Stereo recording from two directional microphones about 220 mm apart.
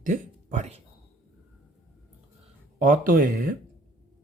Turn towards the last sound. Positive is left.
turn(degrees=-40)  # may be behind; listen again after turning